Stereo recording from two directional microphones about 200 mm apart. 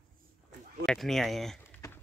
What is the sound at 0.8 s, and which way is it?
Speech, centre (ahead or behind).